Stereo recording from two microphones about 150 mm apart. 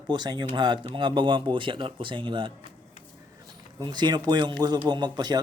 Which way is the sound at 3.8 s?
30° right (ahead or behind).